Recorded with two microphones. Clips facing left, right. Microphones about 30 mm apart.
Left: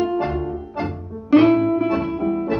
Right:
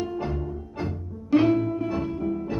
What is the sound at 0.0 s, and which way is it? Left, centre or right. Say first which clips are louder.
Music: left 8 dB; left.